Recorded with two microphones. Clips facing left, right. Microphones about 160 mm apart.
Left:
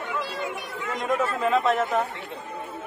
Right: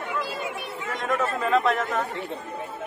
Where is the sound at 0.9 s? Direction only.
15° left (ahead or behind).